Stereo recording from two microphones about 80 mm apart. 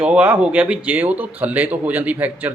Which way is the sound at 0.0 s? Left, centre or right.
Centre.